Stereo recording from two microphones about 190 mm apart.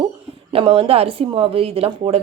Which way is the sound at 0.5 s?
30° right (ahead or behind).